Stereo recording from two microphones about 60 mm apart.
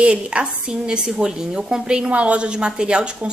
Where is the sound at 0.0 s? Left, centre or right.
Centre.